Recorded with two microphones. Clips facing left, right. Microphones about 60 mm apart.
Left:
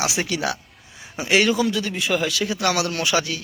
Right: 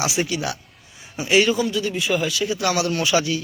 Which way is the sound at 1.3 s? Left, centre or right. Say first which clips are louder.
Right 1 dB; left.